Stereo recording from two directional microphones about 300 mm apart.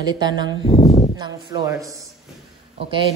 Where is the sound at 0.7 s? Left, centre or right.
Centre.